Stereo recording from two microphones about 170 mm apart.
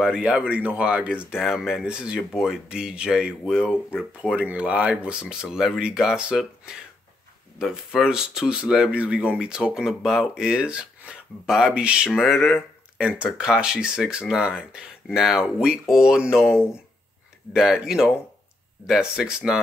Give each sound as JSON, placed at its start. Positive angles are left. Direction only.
{"t": 0.0, "sound": "speech", "side_deg": -5}